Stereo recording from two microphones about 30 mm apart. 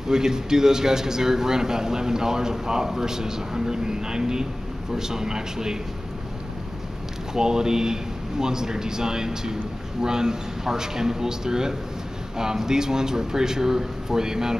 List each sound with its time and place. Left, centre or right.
0.1 s a man's voice: centre
7.3 s a man's voice: right